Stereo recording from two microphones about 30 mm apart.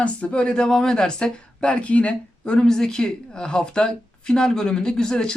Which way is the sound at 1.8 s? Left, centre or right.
Left.